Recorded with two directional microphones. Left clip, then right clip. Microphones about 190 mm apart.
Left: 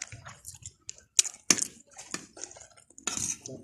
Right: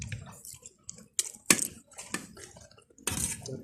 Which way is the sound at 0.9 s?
45° left (ahead or behind).